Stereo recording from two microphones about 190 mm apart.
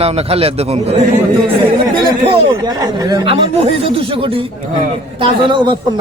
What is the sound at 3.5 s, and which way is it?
A man's voice, 30° right (ahead or behind).